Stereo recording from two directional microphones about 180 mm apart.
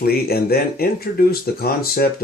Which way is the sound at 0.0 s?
60° left (ahead or behind).